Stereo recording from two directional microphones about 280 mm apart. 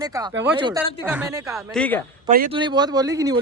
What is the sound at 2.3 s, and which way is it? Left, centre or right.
Speech, right.